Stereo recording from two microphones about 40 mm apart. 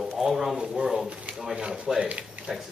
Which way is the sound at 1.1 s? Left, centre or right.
Right.